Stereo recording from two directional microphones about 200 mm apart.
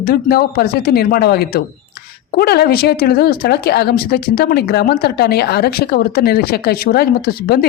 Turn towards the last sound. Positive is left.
turn(degrees=50)  # may be behind; listen again after turning